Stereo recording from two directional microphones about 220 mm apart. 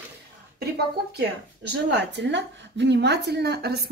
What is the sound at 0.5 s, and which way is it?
Speech, 45° right (ahead or behind).